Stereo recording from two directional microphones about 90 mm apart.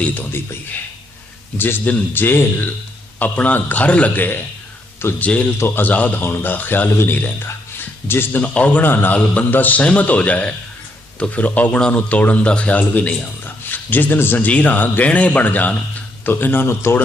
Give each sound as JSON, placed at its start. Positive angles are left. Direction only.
{"t": 0.0, "sound": "a man's voice", "side_deg": 20}
{"t": 1.5, "sound": "a man's voice", "side_deg": 25}
{"t": 5.3, "sound": "a man's voice", "side_deg": 15}